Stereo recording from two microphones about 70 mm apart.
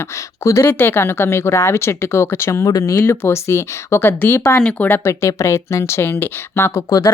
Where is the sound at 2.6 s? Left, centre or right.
Left.